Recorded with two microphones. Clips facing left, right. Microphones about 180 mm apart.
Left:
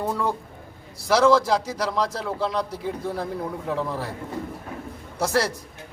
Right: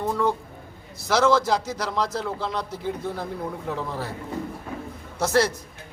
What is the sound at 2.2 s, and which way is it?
Speech, centre (ahead or behind).